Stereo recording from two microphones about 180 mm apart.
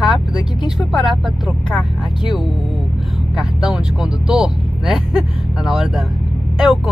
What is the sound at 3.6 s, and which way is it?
Vehicle, 5° right (ahead or behind).